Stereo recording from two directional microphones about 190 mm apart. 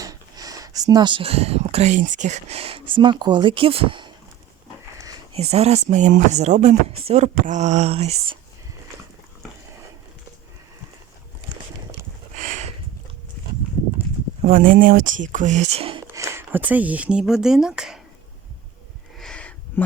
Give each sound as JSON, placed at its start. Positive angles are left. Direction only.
{"t": 0.0, "sound": "speech", "side_deg": -20}
{"t": 5.3, "sound": "speech", "side_deg": -35}
{"t": 12.4, "sound": "a sound", "side_deg": -40}
{"t": 14.4, "sound": "speech", "side_deg": -45}
{"t": 16.0, "sound": "speech", "side_deg": -15}
{"t": 19.1, "sound": "a sound", "side_deg": 5}